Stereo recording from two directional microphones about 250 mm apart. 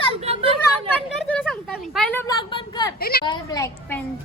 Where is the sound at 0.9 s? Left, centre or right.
Centre.